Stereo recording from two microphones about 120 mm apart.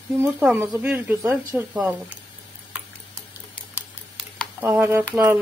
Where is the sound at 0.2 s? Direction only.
15° right (ahead or behind).